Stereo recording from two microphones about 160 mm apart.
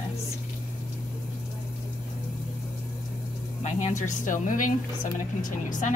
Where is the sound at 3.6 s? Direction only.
45° left (ahead or behind).